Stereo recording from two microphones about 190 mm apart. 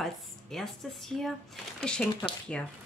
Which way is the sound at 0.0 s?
Centre (ahead or behind).